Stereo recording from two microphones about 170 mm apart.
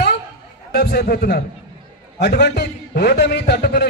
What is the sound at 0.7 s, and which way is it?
Speech, 60° left (ahead or behind).